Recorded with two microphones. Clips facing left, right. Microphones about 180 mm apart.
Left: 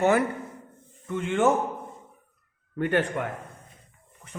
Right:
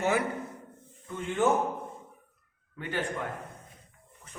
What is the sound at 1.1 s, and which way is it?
Speech, 80° left.